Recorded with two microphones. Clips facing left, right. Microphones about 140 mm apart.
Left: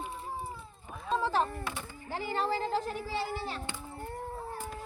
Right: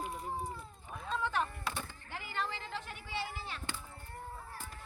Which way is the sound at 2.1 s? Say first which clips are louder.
Left 8 dB; 35° left (ahead or behind).